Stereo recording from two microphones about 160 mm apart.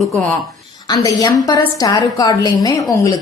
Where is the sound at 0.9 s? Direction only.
25° left (ahead or behind).